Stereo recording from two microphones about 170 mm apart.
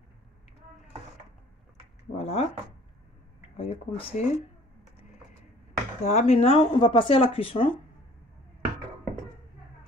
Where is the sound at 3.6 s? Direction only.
35° left (ahead or behind).